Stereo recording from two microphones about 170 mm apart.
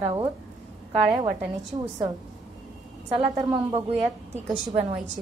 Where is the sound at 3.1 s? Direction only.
25° right (ahead or behind).